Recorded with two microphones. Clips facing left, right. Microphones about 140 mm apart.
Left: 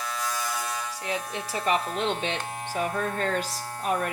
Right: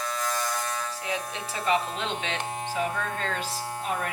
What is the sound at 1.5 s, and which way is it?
Speech, 15° right (ahead or behind).